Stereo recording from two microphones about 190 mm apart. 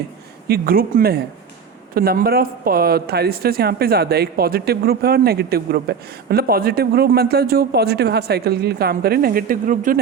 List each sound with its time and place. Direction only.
0.4 s speech: 50° right (ahead or behind)